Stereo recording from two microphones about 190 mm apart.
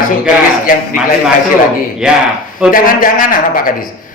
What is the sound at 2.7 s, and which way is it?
Speech, 45° left (ahead or behind).